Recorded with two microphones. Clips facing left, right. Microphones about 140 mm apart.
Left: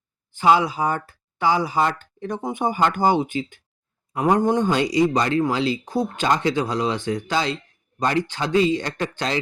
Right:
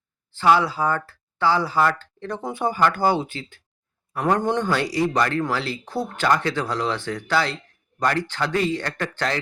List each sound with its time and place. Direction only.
0.3 s speech: 15° left (ahead or behind)